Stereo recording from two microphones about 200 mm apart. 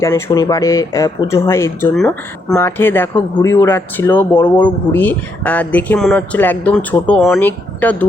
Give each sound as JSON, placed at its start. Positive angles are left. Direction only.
{"t": 0.0, "sound": "speech", "side_deg": 20}